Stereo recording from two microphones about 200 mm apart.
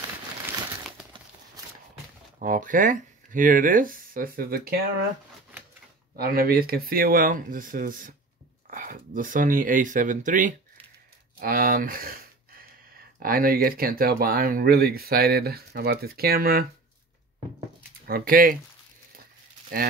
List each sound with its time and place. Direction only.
2.3 s speech: 40° right (ahead or behind)
6.1 s speech: 50° right (ahead or behind)
18.0 s speech: 50° right (ahead or behind)
19.7 s speech: 45° right (ahead or behind)